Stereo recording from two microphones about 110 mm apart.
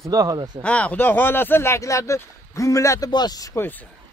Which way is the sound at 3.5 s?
15° left (ahead or behind).